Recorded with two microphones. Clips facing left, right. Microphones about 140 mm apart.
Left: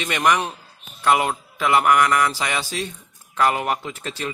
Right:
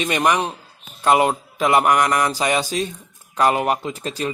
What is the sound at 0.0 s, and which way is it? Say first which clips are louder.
Speech: right 2 dB; 30° right (ahead or behind).